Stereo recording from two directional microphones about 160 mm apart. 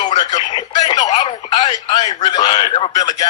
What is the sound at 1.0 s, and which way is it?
Telephone, 45° left (ahead or behind).